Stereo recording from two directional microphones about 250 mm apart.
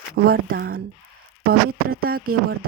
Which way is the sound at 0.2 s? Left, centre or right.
Right.